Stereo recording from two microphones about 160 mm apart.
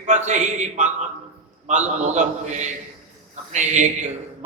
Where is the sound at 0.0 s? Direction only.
50° right (ahead or behind).